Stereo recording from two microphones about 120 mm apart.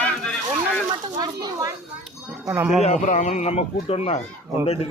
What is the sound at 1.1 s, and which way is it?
Speech, 35° right (ahead or behind).